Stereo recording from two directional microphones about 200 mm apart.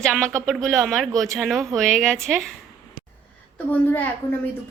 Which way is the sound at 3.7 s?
10° left (ahead or behind).